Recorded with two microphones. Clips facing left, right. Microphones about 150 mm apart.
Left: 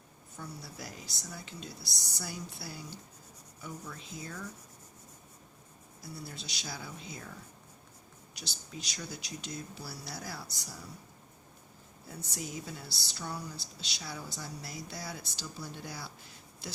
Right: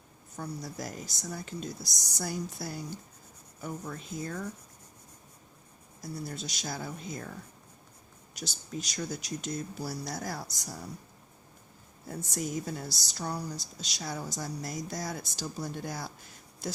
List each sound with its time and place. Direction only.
0.3 s speech: 45° right (ahead or behind)
6.0 s speech: 45° right (ahead or behind)
8.4 s speech: 45° right (ahead or behind)
12.0 s speech: 45° right (ahead or behind)